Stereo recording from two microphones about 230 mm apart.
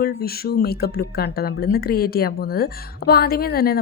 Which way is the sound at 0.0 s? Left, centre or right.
Left.